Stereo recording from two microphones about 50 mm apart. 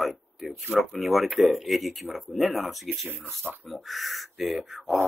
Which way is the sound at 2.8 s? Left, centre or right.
Right.